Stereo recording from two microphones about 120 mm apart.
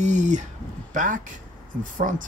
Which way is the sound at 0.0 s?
90° right.